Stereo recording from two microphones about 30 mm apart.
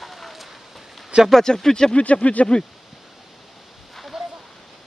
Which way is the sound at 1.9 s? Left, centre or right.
Left.